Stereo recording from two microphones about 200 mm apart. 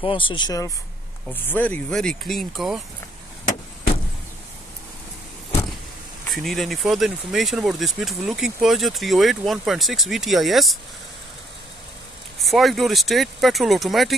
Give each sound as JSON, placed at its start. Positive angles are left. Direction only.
{"t": 0.0, "sound": "speech", "side_deg": 25}
{"t": 6.3, "sound": "speech", "side_deg": 0}
{"t": 12.4, "sound": "speech", "side_deg": 0}